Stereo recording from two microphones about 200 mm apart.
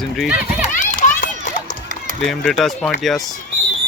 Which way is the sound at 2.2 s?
Centre (ahead or behind).